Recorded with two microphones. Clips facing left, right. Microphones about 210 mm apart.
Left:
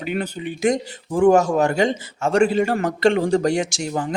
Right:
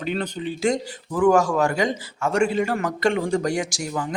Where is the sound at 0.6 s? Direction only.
20° left (ahead or behind).